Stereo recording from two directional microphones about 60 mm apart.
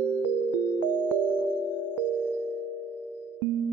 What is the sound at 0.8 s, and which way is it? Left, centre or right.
Music, right.